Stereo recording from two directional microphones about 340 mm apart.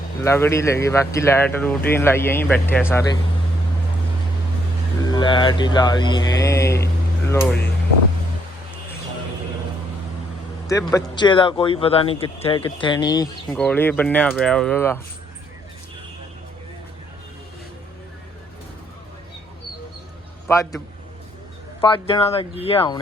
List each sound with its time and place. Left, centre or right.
0.2 s speech: centre
5.0 s speech: centre
10.7 s speech: centre
20.5 s speech: centre